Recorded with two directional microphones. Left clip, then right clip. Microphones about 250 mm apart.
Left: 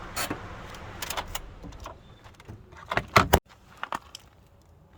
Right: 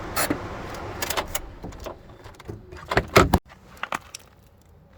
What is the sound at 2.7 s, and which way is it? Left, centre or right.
Door, right.